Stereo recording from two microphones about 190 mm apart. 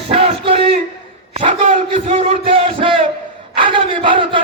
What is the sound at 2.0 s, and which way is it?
Speech, 40° right (ahead or behind).